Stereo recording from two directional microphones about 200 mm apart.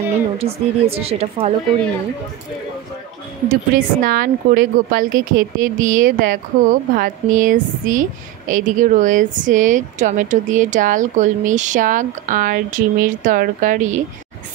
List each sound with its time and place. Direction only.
0.4 s speech: 30° right (ahead or behind)
3.4 s speech: 45° right (ahead or behind)